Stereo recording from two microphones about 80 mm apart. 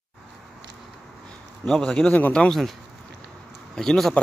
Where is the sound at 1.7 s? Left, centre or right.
Centre.